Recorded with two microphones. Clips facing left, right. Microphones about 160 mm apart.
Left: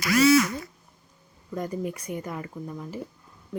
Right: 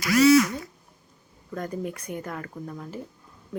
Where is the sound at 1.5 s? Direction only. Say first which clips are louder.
Left 1 dB; 10° left (ahead or behind).